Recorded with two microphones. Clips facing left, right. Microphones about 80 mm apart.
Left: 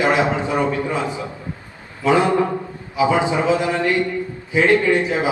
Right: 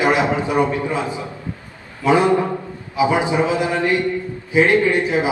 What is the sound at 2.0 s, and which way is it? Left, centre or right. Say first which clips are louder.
A man's voice: right 1 dB; right.